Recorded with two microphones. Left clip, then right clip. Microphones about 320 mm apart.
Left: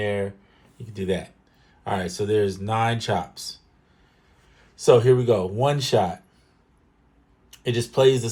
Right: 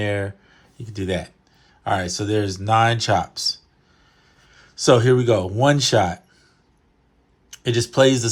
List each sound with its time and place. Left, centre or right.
0.0 s speech: right
4.5 s speech: right
7.5 s speech: right